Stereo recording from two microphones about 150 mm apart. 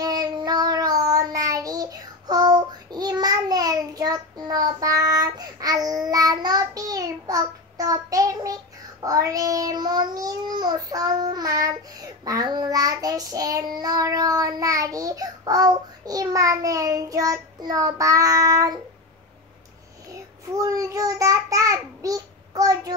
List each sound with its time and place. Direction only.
0.0 s child singing: 25° right (ahead or behind)
20.5 s a child's voice: 25° right (ahead or behind)